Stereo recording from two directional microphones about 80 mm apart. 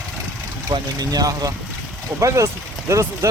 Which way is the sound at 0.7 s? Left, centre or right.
Right.